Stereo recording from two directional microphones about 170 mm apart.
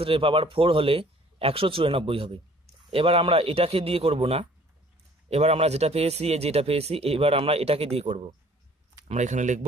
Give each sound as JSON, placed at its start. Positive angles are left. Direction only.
{"t": 0.0, "sound": "a man's voice", "side_deg": -30}